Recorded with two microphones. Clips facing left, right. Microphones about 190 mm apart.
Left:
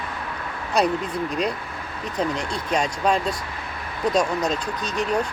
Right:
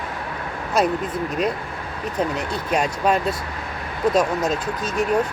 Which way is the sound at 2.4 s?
5° right (ahead or behind).